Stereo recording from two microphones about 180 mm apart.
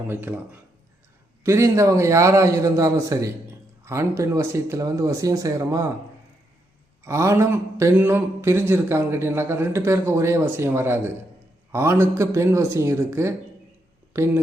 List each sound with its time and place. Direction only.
0.1 s a man's voice: 10° right (ahead or behind)
1.5 s a man's voice: 15° right (ahead or behind)
7.0 s a man's voice: 15° right (ahead or behind)